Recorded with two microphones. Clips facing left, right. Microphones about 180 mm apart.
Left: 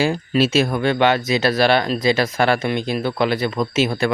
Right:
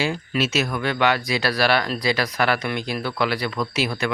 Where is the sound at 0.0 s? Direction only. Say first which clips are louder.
Left 6 dB; 35° left (ahead or behind).